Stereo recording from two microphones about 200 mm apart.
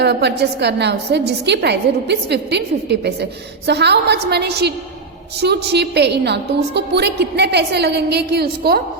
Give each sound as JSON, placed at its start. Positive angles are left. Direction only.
{"t": 0.0, "sound": "a woman's voice", "side_deg": -55}